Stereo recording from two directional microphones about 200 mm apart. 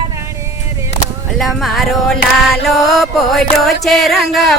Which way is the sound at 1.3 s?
Centre (ahead or behind).